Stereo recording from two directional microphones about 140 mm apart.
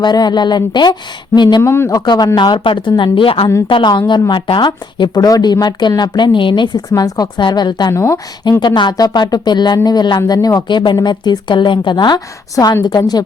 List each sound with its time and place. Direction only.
0.0 s speech: 30° left (ahead or behind)
1.6 s a woman's voice: 20° left (ahead or behind)